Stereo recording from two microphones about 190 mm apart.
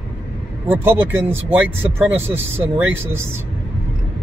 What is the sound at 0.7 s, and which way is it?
Speech, 10° right (ahead or behind).